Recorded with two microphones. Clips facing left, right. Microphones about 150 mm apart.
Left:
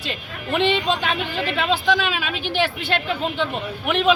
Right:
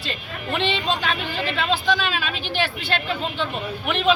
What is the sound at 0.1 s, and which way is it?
A woman's voice, 15° left (ahead or behind).